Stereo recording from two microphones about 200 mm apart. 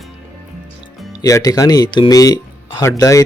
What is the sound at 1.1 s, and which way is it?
Speech, 15° left (ahead or behind).